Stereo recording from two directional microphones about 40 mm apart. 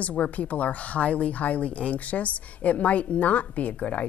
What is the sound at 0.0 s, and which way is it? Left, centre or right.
A woman's voice, left.